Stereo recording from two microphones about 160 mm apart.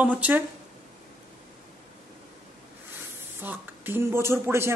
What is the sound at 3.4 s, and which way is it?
A man's voice, 15° right (ahead or behind).